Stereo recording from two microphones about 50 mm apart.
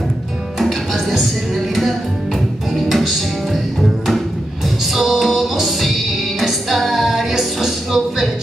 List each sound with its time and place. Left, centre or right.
0.6 s music: centre
2.7 s music: centre
4.9 s music: centre